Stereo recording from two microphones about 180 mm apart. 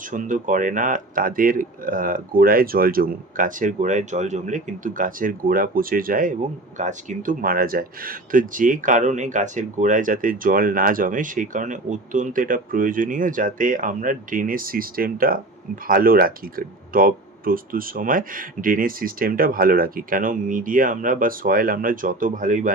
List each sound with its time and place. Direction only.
0.1 s speech: 45° right (ahead or behind)